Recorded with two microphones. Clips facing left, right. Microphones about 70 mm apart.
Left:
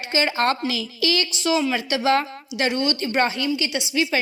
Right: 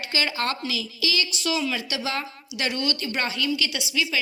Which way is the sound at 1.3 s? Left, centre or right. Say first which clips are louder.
Left 5 dB; left.